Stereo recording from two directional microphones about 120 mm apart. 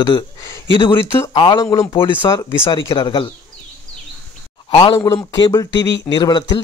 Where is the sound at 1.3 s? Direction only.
45° left (ahead or behind).